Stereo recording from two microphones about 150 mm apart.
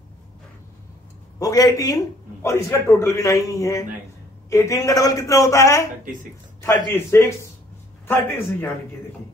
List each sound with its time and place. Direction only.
1.4 s a man's voice: 25° left (ahead or behind)
6.9 s a man's voice: 15° left (ahead or behind)